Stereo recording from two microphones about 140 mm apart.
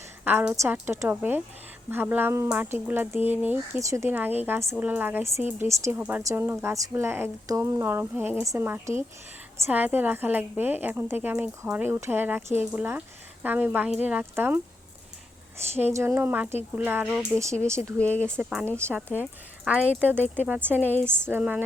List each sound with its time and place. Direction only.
0.3 s a woman's voice: 10° right (ahead or behind)
15.8 s a woman's voice: 15° right (ahead or behind)
18.0 s speech: 10° left (ahead or behind)
18.9 s a woman's voice: 10° right (ahead or behind)